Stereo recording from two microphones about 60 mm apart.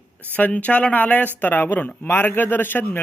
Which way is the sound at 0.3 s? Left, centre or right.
Left.